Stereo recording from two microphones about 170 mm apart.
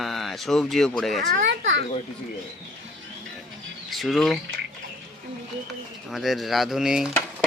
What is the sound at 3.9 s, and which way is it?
Speech, centre (ahead or behind).